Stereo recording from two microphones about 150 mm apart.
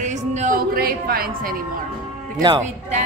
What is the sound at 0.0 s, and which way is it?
Music, 55° right (ahead or behind).